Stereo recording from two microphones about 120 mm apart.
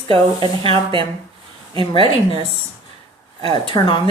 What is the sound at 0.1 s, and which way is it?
Speech, 45° right (ahead or behind).